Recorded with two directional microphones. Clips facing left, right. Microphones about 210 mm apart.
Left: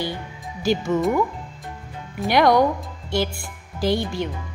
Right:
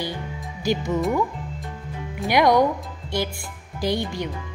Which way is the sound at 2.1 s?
15° right (ahead or behind).